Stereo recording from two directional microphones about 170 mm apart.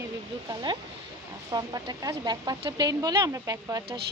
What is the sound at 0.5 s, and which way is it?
Speech, 25° right (ahead or behind).